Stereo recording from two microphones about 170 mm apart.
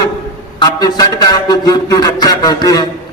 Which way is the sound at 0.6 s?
25° left (ahead or behind).